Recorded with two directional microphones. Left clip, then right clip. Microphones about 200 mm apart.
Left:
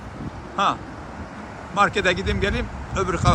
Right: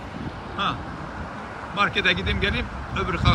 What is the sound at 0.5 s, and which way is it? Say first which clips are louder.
Speech: left 5 dB; centre (ahead or behind).